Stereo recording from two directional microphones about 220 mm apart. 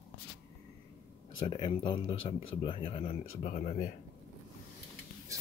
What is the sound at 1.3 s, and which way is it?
Speech, 20° left (ahead or behind).